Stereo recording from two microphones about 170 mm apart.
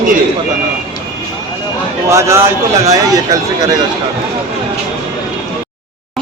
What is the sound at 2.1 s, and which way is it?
A man's voice, 15° right (ahead or behind).